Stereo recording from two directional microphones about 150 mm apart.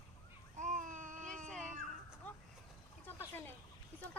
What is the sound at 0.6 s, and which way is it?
Baby cry, 55° right (ahead or behind).